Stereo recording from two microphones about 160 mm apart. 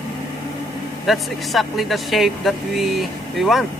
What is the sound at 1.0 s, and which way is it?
Speech, centre (ahead or behind).